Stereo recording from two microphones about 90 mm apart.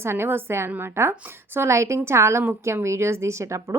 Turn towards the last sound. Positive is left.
turn(degrees=-35)  # may be behind; listen again after turning